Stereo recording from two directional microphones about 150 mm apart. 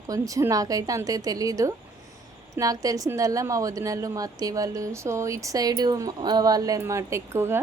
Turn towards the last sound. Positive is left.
turn(degrees=-15)  # may be behind; listen again after turning